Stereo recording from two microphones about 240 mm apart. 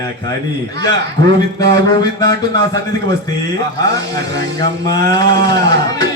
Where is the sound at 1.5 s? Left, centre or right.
Centre.